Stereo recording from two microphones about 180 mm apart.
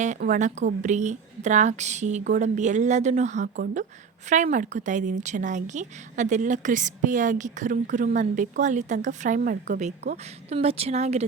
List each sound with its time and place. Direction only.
0.0 s a woman's voice: 45° right (ahead or behind)
10.5 s speech: 35° right (ahead or behind)